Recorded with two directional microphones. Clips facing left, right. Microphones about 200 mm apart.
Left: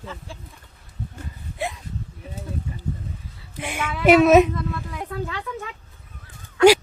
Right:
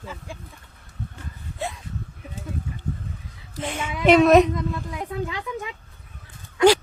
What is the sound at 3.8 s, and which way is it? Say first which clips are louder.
Speech: left 4 dB; 15° right (ahead or behind).